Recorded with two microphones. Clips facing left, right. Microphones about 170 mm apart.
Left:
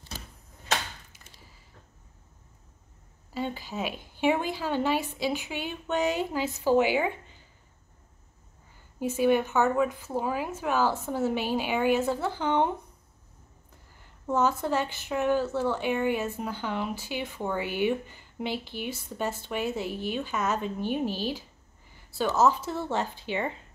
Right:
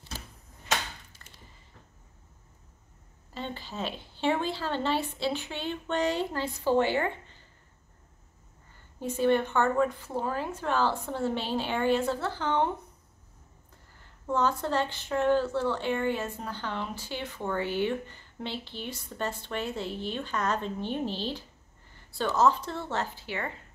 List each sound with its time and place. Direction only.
3.3 s a woman's voice: 10° left (ahead or behind)
9.0 s a woman's voice: 10° left (ahead or behind)
14.2 s a woman's voice: 10° left (ahead or behind)